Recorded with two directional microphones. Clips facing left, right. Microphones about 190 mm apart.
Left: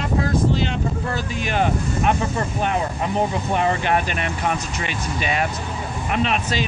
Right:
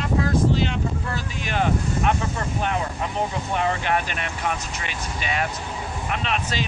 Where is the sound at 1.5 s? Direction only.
15° left (ahead or behind).